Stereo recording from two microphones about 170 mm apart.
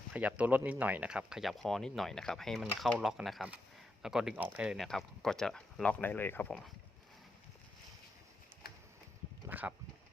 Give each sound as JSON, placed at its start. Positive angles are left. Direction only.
{"t": 0.1, "sound": "speech", "side_deg": -10}
{"t": 8.6, "sound": "a sound", "side_deg": 65}
{"t": 9.5, "sound": "speech", "side_deg": -10}